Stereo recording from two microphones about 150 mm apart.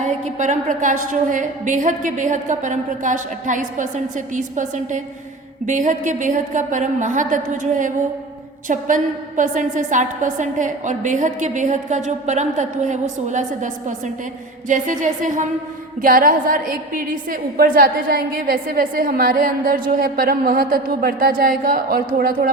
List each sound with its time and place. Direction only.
0.0 s a woman's voice: 55° right (ahead or behind)
16.0 s a woman's voice: 70° right (ahead or behind)